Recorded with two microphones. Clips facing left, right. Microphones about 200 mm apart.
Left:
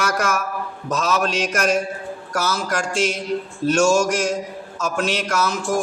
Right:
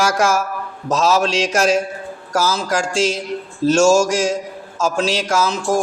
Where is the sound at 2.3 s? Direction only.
25° right (ahead or behind).